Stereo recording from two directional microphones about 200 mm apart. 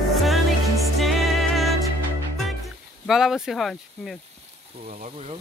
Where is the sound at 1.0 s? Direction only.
Centre (ahead or behind).